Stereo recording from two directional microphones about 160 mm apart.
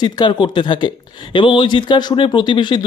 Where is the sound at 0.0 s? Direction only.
30° left (ahead or behind).